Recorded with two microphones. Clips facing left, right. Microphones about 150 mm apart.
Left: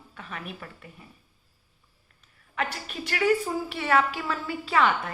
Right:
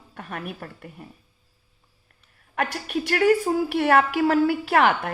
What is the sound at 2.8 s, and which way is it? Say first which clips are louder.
Speech: right 6 dB; 55° right (ahead or behind).